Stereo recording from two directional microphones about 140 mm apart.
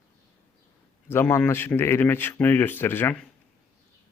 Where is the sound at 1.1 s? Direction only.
15° left (ahead or behind).